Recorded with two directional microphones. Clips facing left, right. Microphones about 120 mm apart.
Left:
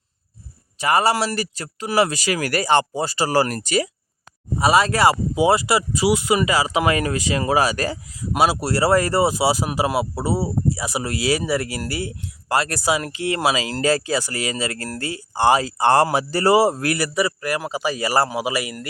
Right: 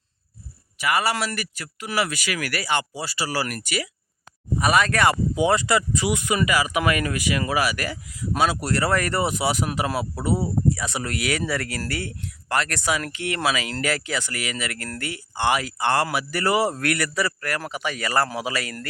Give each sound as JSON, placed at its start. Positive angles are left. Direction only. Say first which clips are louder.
{"t": 0.8, "sound": "speech", "louder": "left 5 dB", "side_deg": 35}
{"t": 4.5, "sound": "speech", "louder": "left 3 dB", "side_deg": 25}
{"t": 8.5, "sound": "speech", "louder": "left 5 dB", "side_deg": 25}